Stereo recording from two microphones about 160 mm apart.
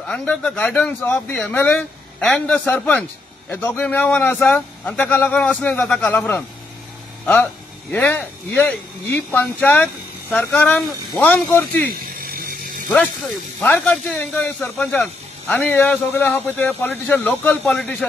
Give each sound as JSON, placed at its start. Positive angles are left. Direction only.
{"t": 0.0, "sound": "a man's voice", "side_deg": 5}
{"t": 7.9, "sound": "a man's voice", "side_deg": 10}
{"t": 11.9, "sound": "ratchet", "side_deg": -65}
{"t": 13.6, "sound": "a man's voice", "side_deg": 10}